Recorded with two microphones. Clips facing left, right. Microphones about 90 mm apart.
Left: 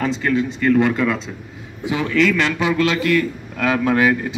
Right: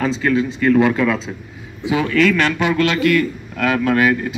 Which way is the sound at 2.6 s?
25° left (ahead or behind).